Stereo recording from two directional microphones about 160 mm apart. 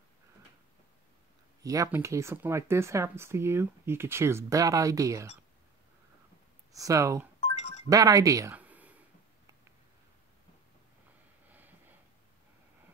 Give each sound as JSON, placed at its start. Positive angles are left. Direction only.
{"t": 1.6, "sound": "speech", "side_deg": -20}
{"t": 6.7, "sound": "speech", "side_deg": -20}
{"t": 7.3, "sound": "music", "side_deg": 45}
{"t": 7.9, "sound": "speech", "side_deg": -20}